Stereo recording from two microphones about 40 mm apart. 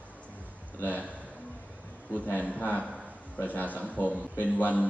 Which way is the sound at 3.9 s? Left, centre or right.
Left.